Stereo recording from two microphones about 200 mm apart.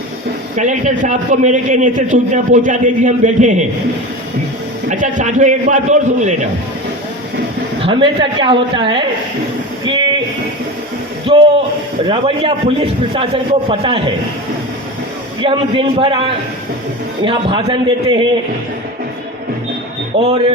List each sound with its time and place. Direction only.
0.5 s a man's voice: 40° right (ahead or behind)
4.9 s a man's voice: 40° right (ahead or behind)
7.8 s a man's voice: 25° right (ahead or behind)
9.8 s a sound: 20° right (ahead or behind)
11.3 s a man's voice: 25° right (ahead or behind)
15.4 s a man's voice: 25° right (ahead or behind)
17.2 s a man's voice: 25° right (ahead or behind)
20.1 s a man's voice: 30° right (ahead or behind)